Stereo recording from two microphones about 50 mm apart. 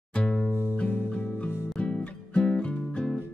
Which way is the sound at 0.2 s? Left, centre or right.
Centre.